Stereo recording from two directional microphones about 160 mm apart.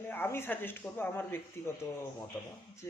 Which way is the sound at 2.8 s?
15° left (ahead or behind).